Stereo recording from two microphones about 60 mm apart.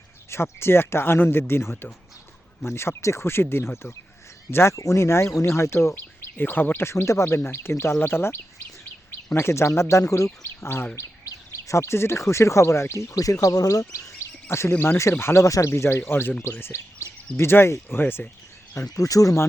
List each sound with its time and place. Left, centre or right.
0.3 s speech: left
5.9 s speech: left
6.8 s speech: left
10.9 s speech: left
14.5 s speech: left
15.2 s speech: left
17.0 s a sound: left
17.3 s speech: left
18.9 s speech: left